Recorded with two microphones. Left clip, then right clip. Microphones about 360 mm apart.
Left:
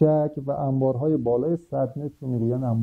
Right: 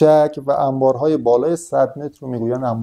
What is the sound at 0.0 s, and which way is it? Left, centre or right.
Speech, centre.